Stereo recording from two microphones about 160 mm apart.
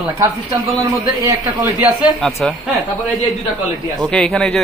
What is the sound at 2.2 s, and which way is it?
Speech, centre (ahead or behind).